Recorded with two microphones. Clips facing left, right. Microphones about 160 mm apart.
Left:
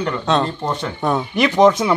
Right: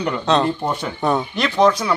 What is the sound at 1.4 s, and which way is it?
Speech, 20° left (ahead or behind).